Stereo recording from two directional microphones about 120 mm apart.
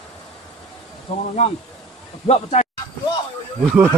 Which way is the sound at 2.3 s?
65° left (ahead or behind).